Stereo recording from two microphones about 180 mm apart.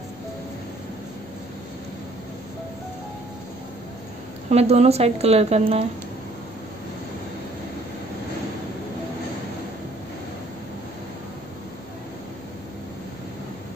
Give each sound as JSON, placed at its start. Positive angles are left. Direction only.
{"t": 4.5, "sound": "speech", "side_deg": -35}